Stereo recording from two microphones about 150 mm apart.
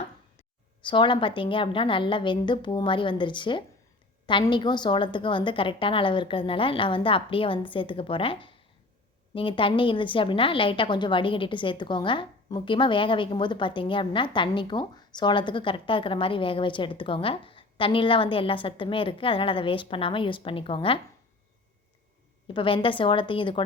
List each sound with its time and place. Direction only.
0.9 s a woman's voice: 35° left (ahead or behind)
22.4 s a woman's voice: 35° left (ahead or behind)